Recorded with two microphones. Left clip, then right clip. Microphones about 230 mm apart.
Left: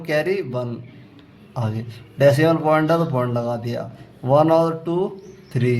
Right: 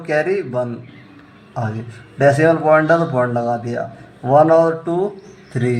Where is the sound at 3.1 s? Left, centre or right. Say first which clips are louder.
Right 5 dB; left.